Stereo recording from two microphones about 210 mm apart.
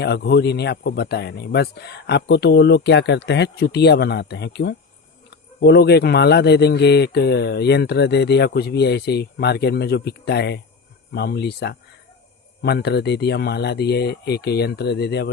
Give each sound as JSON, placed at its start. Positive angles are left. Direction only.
{"t": 0.0, "sound": "speech", "side_deg": 50}